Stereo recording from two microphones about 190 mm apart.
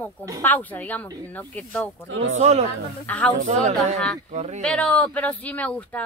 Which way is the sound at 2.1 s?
80° right.